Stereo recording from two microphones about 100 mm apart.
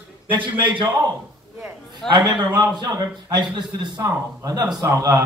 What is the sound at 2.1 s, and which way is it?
Speech, 45° right (ahead or behind).